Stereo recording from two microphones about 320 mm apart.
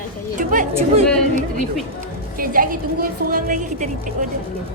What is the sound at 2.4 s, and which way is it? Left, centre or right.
A woman's voice, right.